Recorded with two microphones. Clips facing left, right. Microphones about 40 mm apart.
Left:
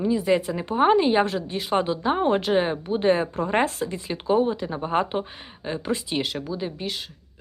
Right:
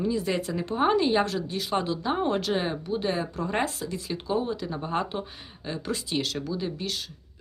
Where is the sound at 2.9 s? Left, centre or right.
Left.